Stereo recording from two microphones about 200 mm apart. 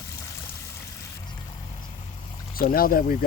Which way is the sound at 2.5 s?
45° left (ahead or behind).